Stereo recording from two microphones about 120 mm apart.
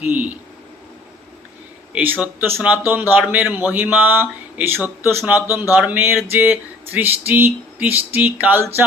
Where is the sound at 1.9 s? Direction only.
15° right (ahead or behind).